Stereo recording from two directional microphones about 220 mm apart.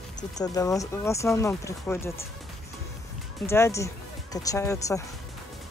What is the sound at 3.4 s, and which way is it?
Speech, 10° left (ahead or behind).